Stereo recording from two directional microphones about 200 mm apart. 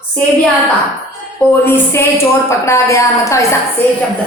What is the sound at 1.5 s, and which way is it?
A woman's voice, 10° left (ahead or behind).